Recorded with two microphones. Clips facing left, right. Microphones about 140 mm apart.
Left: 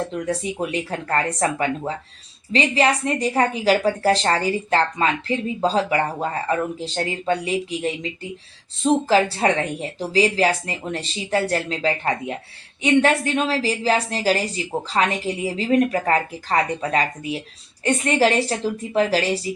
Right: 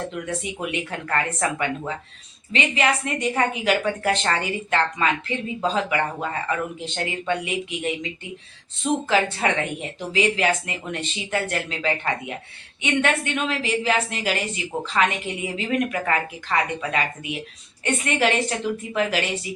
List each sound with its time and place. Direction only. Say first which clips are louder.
0.3 s a woman's voice: left 4 dB; 35° left (ahead or behind)